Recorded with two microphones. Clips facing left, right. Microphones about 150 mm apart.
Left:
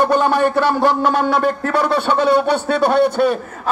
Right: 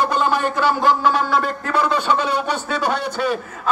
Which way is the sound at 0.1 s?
55° left (ahead or behind).